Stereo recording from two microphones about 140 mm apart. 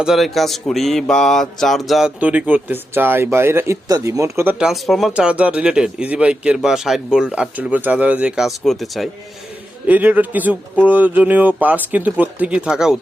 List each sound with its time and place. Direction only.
0.0 s mantra: centre (ahead or behind); by 4.5 s 20° right (ahead or behind)
4.6 s mantra: centre (ahead or behind)
9.8 s mantra: 10° right (ahead or behind)